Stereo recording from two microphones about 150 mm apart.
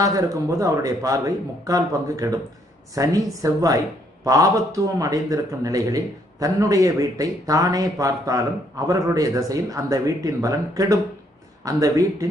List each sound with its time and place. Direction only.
0.0 s speech: 20° right (ahead or behind)